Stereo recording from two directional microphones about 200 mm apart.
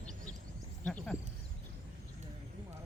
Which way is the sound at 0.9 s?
5° left (ahead or behind).